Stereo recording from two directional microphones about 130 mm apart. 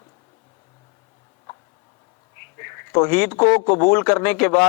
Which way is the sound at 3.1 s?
10° left (ahead or behind).